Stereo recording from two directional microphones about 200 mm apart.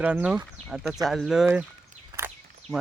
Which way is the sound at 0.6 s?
35° right (ahead or behind).